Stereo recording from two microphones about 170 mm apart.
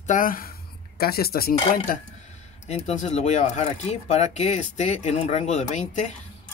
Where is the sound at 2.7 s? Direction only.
40° left (ahead or behind).